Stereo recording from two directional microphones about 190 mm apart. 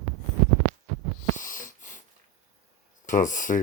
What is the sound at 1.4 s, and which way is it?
Wheeze, 45° left (ahead or behind).